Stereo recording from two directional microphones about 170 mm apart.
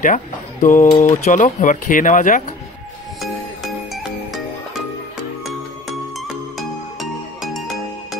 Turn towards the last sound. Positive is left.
turn(degrees=0)  # may be behind; listen again after turning